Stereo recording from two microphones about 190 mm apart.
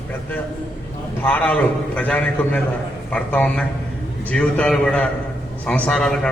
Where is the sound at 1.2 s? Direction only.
5° left (ahead or behind).